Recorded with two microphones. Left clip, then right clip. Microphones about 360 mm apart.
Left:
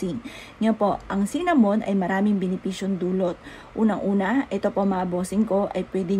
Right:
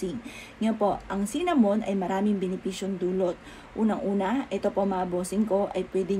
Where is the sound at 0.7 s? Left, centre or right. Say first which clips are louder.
Even; left.